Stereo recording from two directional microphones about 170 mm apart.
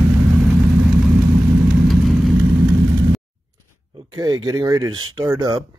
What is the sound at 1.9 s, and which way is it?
Vehicle, centre (ahead or behind).